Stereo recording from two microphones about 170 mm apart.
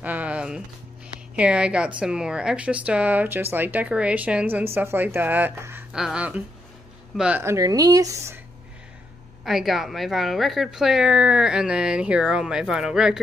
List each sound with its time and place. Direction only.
0.0 s music: 10° right (ahead or behind)
1.3 s speech: 5° right (ahead or behind)
9.4 s speech: centre (ahead or behind)